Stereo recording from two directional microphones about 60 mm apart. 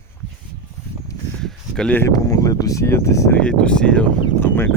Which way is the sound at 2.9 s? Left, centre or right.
Left.